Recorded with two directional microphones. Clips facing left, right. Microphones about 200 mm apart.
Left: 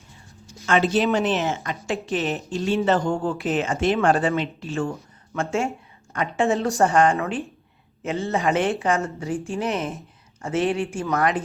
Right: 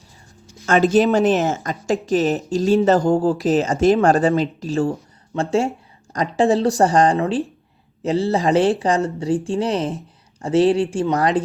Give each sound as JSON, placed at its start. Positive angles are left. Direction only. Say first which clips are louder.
{"t": 0.6, "sound": "a woman's voice", "louder": "right 5 dB", "side_deg": -40}